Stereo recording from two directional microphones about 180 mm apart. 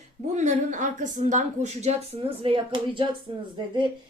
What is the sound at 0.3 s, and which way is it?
A woman's voice, 40° right (ahead or behind).